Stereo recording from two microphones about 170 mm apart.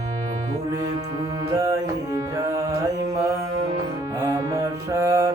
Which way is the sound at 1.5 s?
20° right (ahead or behind).